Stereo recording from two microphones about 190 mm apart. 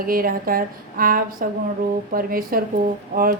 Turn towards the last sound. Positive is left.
turn(degrees=-50)  # may be behind; listen again after turning